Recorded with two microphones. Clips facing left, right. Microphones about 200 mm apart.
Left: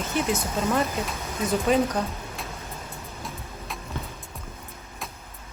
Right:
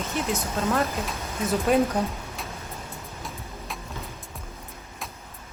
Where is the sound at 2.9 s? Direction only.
Centre (ahead or behind).